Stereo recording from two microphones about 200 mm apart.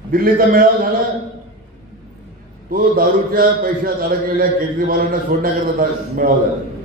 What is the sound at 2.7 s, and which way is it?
A man's voice, 45° right (ahead or behind).